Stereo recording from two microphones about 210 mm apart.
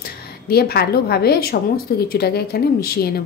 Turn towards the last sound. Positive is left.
turn(degrees=50)  # may be behind; listen again after turning